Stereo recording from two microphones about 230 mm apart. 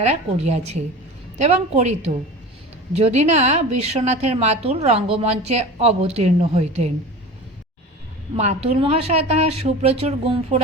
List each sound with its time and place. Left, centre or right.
0.0 s a woman's voice: right
8.4 s a woman's voice: right